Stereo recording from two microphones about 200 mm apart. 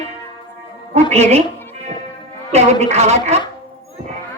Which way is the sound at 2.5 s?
35° right (ahead or behind).